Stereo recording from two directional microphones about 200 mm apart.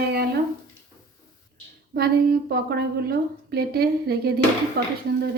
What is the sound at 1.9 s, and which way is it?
A woman's voice, 50° right (ahead or behind).